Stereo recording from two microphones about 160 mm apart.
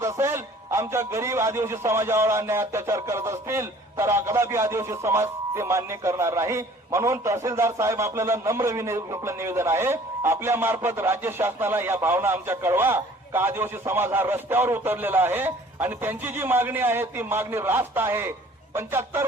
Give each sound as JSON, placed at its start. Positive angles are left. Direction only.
{"t": 0.0, "sound": "a man's voice", "side_deg": -20}